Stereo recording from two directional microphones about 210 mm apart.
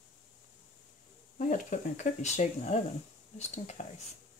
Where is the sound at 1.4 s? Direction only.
35° left (ahead or behind).